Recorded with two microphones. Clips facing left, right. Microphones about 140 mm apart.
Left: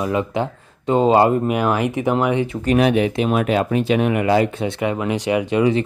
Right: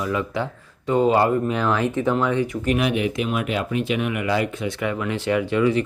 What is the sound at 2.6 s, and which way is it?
Speech, 35° left (ahead or behind).